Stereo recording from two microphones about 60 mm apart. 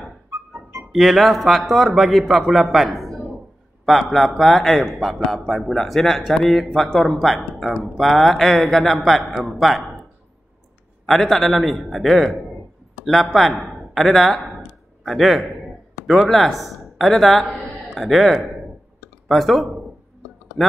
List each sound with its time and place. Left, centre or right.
0.3 s music: right
0.9 s a man's voice: centre
11.1 s a man's voice: centre